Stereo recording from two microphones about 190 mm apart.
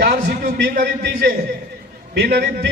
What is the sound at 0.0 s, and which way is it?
A man's voice, 50° right (ahead or behind).